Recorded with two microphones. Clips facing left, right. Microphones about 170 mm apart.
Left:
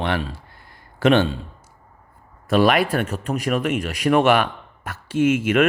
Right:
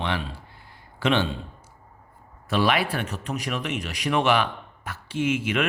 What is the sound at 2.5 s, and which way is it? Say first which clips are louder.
Speech: left 6 dB; 50° left (ahead or behind).